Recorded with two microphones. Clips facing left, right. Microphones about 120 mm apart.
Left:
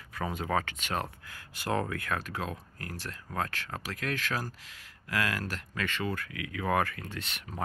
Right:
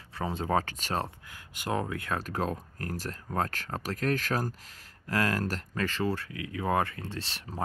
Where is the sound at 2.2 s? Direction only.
40° right (ahead or behind).